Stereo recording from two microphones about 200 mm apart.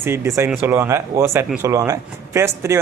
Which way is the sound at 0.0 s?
15° right (ahead or behind).